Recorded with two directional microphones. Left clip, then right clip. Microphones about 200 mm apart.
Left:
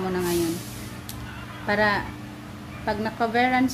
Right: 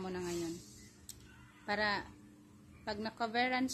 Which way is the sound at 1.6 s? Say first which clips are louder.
Left 13 dB; 30° right (ahead or behind).